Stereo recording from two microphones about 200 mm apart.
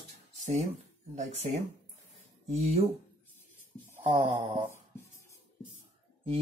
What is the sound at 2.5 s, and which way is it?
Speech, 30° right (ahead or behind).